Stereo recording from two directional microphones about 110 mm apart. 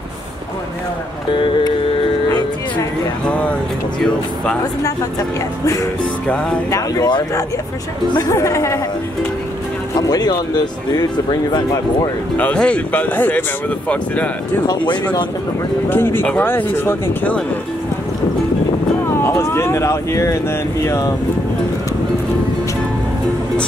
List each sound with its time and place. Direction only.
3.3 s speech: 10° left (ahead or behind)
6.2 s speech: 10° left (ahead or behind)
6.7 s speech: 35° left (ahead or behind)
9.9 s speech: 35° left (ahead or behind)
12.4 s speech: 10° left (ahead or behind)
15.9 s speech: 20° left (ahead or behind)
19.2 s speech: 25° left (ahead or behind)